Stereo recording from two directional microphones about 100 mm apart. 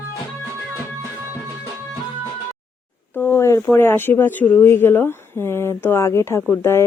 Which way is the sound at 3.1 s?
25° left (ahead or behind).